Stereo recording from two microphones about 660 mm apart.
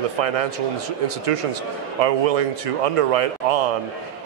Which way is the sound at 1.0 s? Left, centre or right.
Right.